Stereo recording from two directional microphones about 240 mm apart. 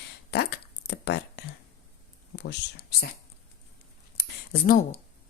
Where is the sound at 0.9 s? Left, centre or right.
Left.